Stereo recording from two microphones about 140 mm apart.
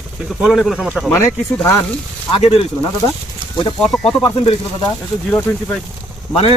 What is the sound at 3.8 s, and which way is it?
Speech, 5° left (ahead or behind).